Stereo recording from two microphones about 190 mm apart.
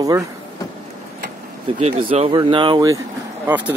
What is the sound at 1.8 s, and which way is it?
Speech, 30° right (ahead or behind).